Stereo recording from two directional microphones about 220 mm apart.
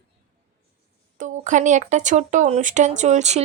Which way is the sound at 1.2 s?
35° right (ahead or behind).